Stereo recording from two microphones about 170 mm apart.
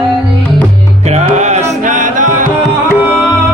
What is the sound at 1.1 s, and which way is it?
Music, 40° right (ahead or behind).